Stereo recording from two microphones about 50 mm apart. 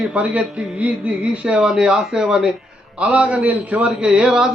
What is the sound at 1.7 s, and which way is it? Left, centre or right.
Speech, centre.